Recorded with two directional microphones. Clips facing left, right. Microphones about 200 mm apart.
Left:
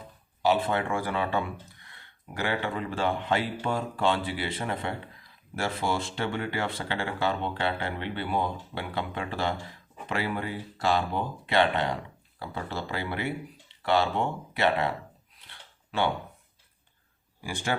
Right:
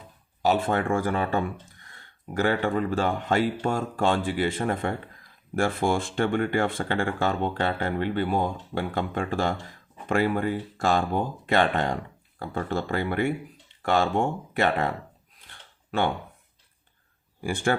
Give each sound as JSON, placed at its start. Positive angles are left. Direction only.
{"t": 0.4, "sound": "speech", "side_deg": -45}
{"t": 15.4, "sound": "a sound", "side_deg": -50}
{"t": 17.4, "sound": "speech", "side_deg": -55}